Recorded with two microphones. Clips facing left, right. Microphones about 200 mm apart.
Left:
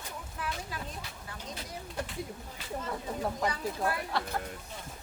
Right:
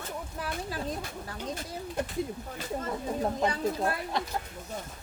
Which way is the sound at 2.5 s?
45° right (ahead or behind).